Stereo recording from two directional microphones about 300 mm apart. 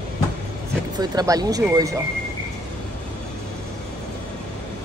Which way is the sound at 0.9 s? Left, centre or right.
Centre.